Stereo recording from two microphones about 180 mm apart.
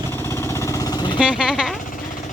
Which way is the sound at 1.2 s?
5° right (ahead or behind).